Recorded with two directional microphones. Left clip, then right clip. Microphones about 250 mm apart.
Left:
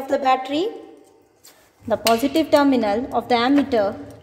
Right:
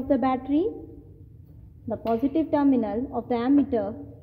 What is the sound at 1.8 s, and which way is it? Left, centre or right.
A woman's voice, centre.